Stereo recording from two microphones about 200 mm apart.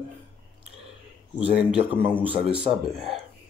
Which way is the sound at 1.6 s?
5° right (ahead or behind).